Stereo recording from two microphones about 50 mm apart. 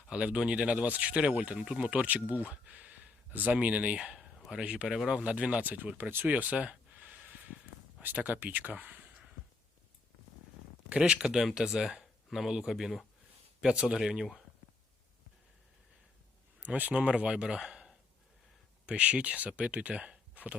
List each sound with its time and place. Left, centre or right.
0.1 s speech: right
1.5 s speech: centre
1.9 s speech: right
3.9 s speech: centre
5.7 s speech: right
6.2 s a sound: right
8.0 s speech: right
10.8 s speech: right
16.6 s speech: right; by 17.9 s centre
18.9 s speech: right
20.3 s a sound: right